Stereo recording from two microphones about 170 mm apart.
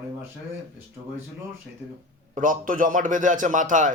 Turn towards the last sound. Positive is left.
turn(degrees=-50)  # may be behind; listen again after turning